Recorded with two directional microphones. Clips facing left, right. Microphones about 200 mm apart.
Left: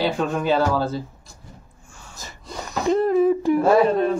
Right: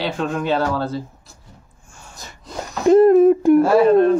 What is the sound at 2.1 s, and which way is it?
Wheeze, centre (ahead or behind).